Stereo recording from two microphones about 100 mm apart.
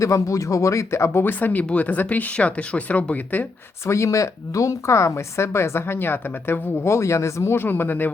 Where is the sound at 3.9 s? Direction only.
30° left (ahead or behind).